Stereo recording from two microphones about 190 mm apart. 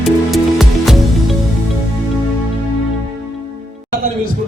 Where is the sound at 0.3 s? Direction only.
Centre (ahead or behind).